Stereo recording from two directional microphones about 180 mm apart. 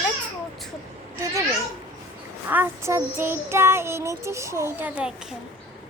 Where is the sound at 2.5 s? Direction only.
15° right (ahead or behind).